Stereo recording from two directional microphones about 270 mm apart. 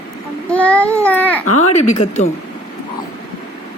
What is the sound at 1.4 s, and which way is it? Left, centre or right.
Speech, left.